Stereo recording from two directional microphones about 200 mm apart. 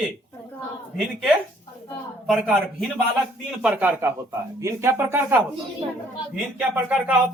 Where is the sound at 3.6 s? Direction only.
10° right (ahead or behind).